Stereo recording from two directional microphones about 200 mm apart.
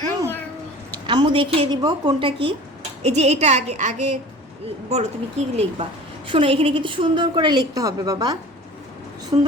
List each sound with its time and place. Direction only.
1.0 s a woman's voice: 25° right (ahead or behind)